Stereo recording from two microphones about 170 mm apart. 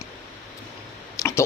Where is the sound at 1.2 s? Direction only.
15° left (ahead or behind).